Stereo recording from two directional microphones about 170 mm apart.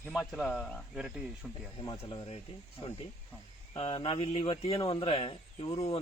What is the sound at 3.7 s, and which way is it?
Speech, 30° left (ahead or behind).